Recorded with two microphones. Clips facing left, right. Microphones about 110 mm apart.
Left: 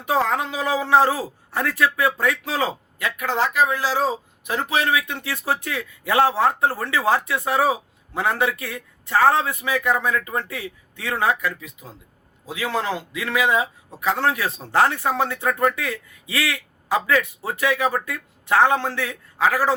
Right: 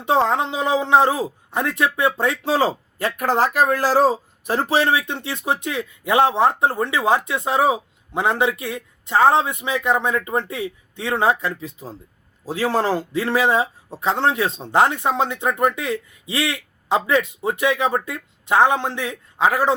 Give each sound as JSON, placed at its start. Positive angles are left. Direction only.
{"t": 0.0, "sound": "a man's voice", "side_deg": -25}
{"t": 3.2, "sound": "a man's voice", "side_deg": -45}